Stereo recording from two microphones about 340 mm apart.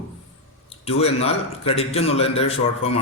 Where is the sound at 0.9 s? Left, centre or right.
Centre.